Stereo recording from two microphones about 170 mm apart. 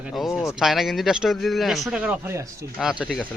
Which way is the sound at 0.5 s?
Centre (ahead or behind).